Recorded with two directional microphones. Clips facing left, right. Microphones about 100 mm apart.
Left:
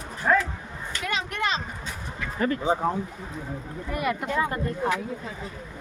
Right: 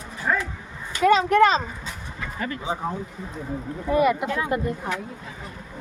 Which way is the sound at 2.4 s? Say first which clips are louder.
Left 5 dB; 40° left (ahead or behind).